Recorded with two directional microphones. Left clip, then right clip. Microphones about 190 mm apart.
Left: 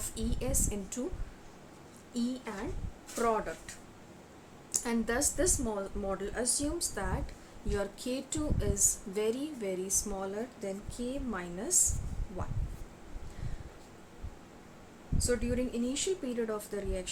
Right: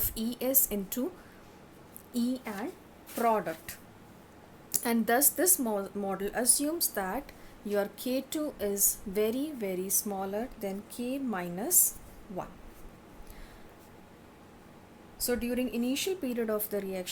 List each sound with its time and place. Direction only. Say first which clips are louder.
0.1 s a woman's voice: right 5 dB; 45° right (ahead or behind)
2.1 s a woman's voice: right 3 dB; 50° right (ahead or behind)
15.2 s a woman's voice: right 1 dB; 40° right (ahead or behind)